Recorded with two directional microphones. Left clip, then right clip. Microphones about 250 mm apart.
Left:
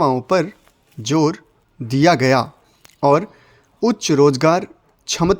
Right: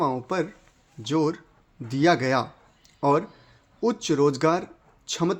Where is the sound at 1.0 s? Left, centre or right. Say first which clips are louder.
Left 7 dB; left.